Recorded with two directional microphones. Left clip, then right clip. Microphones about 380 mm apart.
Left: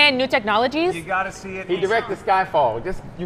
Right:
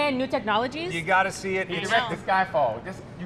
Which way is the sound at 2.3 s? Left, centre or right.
Left.